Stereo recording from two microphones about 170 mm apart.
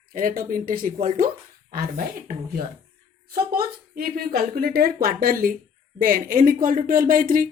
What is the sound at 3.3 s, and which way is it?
Speech, 60° right (ahead or behind).